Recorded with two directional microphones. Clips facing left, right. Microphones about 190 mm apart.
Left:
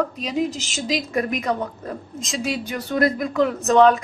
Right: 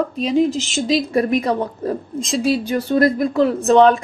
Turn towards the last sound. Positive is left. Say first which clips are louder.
# right 3 dB
turn(degrees=-30)  # may be behind; listen again after turning